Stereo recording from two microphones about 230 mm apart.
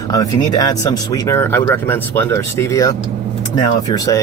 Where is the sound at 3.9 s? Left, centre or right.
Centre.